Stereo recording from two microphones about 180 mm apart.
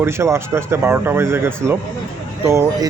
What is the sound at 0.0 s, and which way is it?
Speech, 15° right (ahead or behind).